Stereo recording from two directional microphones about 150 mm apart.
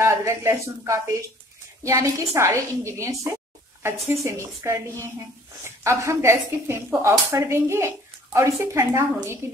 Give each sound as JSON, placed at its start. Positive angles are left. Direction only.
{"t": 0.0, "sound": "a woman's voice", "side_deg": -20}
{"t": 5.9, "sound": "speech", "side_deg": -15}